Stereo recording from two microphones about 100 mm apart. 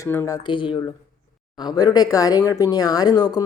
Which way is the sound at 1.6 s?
40° left (ahead or behind).